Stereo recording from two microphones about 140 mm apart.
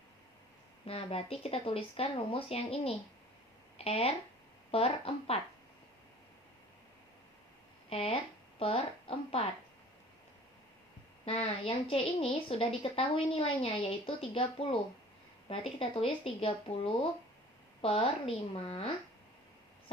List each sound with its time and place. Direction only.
0.9 s a woman's voice: 45° left (ahead or behind)
7.9 s speech: 40° left (ahead or behind)
11.3 s a woman's voice: 45° left (ahead or behind)